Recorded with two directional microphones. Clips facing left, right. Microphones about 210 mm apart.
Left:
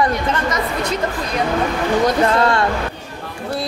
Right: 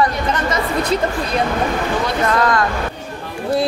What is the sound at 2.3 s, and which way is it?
Speech, 30° left (ahead or behind).